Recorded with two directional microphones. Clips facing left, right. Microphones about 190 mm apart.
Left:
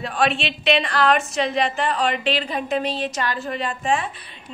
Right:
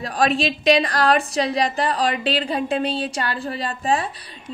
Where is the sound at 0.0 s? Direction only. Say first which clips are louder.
Right 2 dB; 40° right (ahead or behind).